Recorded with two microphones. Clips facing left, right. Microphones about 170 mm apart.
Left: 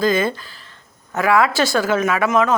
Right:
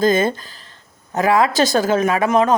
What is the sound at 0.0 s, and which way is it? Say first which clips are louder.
Speech: right 2 dB; 45° right (ahead or behind).